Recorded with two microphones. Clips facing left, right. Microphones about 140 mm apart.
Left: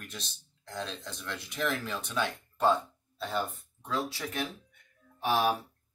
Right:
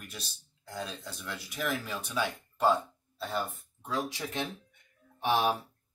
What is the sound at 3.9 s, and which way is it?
Speech, 15° right (ahead or behind).